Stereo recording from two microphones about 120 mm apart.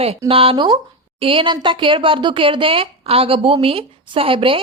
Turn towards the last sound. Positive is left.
turn(degrees=-50)  # may be behind; listen again after turning